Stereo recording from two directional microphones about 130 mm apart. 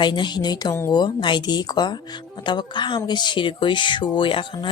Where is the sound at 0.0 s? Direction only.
35° left (ahead or behind).